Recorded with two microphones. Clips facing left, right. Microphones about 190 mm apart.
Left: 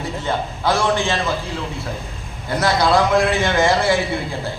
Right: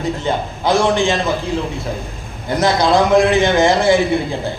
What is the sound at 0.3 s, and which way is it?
Speech, 15° right (ahead or behind).